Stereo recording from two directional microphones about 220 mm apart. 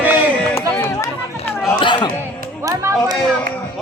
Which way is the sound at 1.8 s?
20° left (ahead or behind).